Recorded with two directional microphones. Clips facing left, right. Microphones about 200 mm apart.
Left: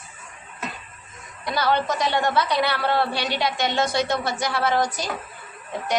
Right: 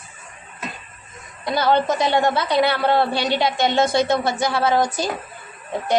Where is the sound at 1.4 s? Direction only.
25° right (ahead or behind).